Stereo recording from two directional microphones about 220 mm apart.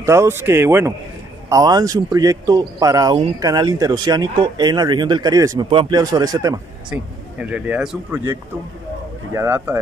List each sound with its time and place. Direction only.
0.0 s a man's voice: 10° right (ahead or behind)
6.9 s a man's voice: 5° right (ahead or behind)
9.3 s a man's voice: 10° right (ahead or behind)